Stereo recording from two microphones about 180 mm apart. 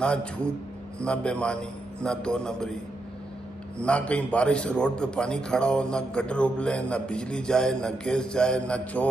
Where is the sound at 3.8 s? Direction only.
5° left (ahead or behind).